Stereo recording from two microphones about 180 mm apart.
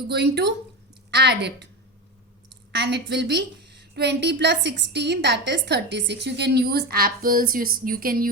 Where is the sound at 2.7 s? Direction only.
70° right (ahead or behind).